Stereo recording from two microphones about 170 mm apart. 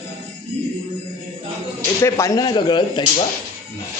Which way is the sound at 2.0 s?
15° left (ahead or behind).